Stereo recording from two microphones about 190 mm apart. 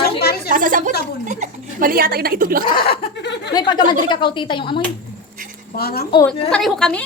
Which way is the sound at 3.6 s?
25° left (ahead or behind).